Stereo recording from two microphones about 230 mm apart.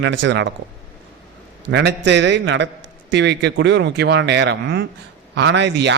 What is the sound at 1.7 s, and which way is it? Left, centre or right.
A man's voice, right.